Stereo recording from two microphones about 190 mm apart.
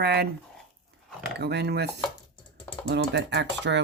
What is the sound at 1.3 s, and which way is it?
Speech, 60° right (ahead or behind).